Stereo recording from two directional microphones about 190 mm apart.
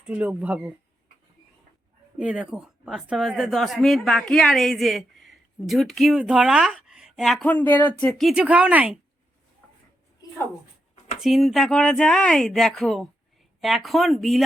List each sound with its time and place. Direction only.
0.0 s speech: 5° right (ahead or behind)
2.1 s speech: 5° right (ahead or behind)
8.0 s speech: centre (ahead or behind)
11.2 s speech: centre (ahead or behind)